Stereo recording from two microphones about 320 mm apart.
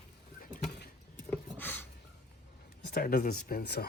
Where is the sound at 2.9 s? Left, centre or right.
Left.